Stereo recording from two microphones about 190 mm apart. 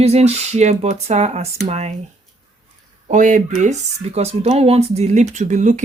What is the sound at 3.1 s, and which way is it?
Speech, 40° right (ahead or behind).